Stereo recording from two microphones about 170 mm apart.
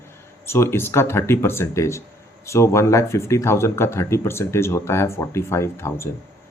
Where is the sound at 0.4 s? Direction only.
15° left (ahead or behind).